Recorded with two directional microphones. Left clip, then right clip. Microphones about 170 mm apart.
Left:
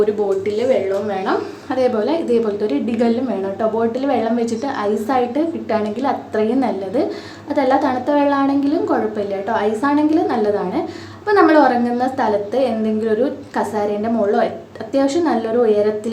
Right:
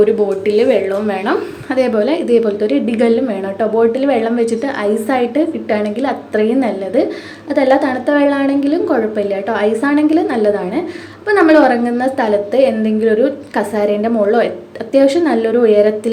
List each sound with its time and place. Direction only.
0.0 s a woman's voice: 20° right (ahead or behind)
1.7 s a woman's voice: 10° right (ahead or behind)